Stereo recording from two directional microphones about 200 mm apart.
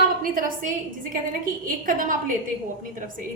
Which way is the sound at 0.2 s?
45° right (ahead or behind).